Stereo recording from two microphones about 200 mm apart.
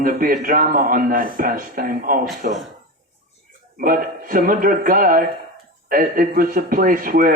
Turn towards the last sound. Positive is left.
turn(degrees=-45)  # may be behind; listen again after turning